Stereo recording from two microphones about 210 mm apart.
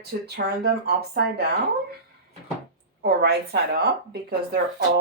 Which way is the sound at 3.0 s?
50° right (ahead or behind).